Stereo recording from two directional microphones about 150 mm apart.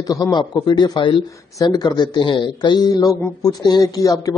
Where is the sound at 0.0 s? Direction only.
25° left (ahead or behind).